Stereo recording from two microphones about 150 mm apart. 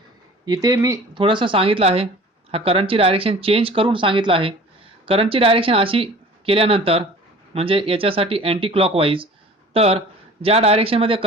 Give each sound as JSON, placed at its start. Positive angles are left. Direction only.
{"t": 0.4, "sound": "speech", "side_deg": -25}
{"t": 1.2, "sound": "speech", "side_deg": -35}